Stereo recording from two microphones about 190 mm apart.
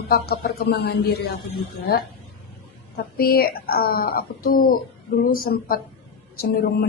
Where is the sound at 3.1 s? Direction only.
50° left (ahead or behind).